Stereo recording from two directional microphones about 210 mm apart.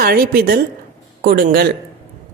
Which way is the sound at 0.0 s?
45° right (ahead or behind).